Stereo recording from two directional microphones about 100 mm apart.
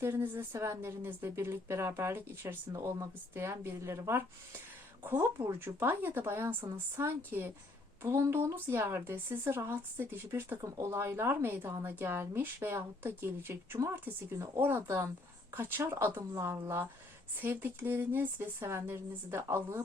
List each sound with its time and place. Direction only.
0.0 s a woman's voice: 25° right (ahead or behind)